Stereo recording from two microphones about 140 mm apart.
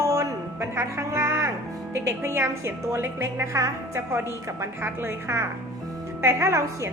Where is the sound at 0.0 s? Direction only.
20° right (ahead or behind).